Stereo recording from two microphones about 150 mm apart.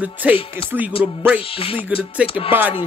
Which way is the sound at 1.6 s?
40° left (ahead or behind).